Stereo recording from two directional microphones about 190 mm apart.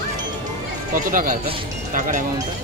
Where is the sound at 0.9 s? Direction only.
45° right (ahead or behind).